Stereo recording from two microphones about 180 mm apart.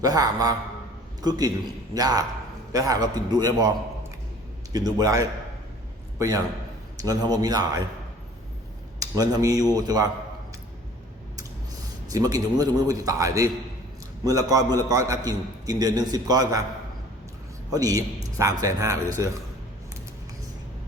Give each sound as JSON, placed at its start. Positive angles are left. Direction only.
{"t": 0.0, "sound": "a man's voice", "side_deg": -20}
{"t": 4.7, "sound": "a man's voice", "side_deg": -20}
{"t": 9.0, "sound": "a man's voice", "side_deg": -20}
{"t": 12.1, "sound": "a man's voice", "side_deg": -20}
{"t": 17.7, "sound": "a man's voice", "side_deg": -20}